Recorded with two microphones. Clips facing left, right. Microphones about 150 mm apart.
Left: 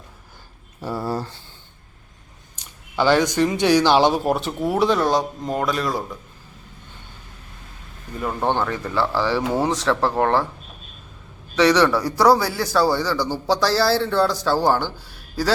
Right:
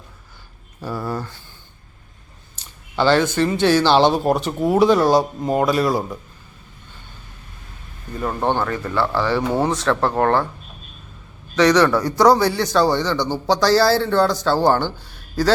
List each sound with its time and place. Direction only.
0.9 s speech: 30° left (ahead or behind)
2.6 s speech: 10° left (ahead or behind); by 6.1 s 15° right (ahead or behind)
8.4 s speech: 15° right (ahead or behind)
9.0 s speech: 5° left (ahead or behind)
11.5 s speech: 10° left (ahead or behind)